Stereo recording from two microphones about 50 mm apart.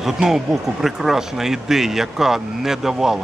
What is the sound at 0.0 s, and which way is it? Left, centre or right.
Speech, centre.